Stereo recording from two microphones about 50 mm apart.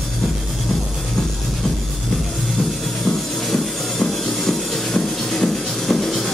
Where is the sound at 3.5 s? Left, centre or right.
Centre.